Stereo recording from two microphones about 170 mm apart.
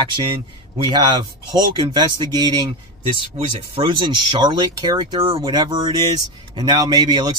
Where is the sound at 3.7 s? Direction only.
30° right (ahead or behind).